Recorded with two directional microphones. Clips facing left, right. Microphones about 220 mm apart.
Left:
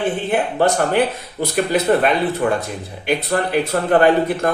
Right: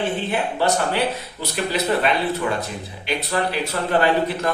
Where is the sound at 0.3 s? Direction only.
50° left (ahead or behind).